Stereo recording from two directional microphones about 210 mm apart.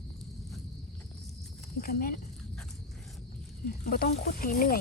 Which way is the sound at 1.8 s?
45° left (ahead or behind).